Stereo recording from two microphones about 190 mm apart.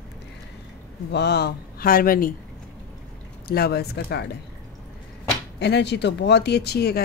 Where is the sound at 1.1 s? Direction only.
60° left (ahead or behind).